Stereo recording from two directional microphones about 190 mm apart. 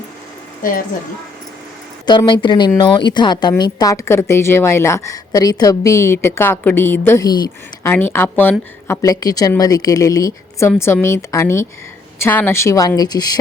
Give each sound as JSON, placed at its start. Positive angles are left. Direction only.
{"t": 0.6, "sound": "a woman's voice", "side_deg": 45}
{"t": 2.0, "sound": "a woman's voice", "side_deg": 25}